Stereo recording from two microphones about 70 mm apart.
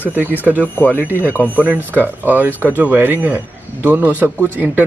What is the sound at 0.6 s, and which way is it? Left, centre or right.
Speech, left.